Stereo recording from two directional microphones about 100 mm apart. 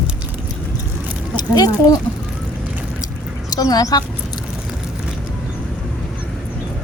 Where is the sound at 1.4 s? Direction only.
40° left (ahead or behind).